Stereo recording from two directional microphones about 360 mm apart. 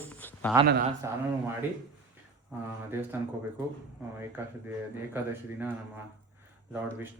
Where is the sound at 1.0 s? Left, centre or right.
Centre.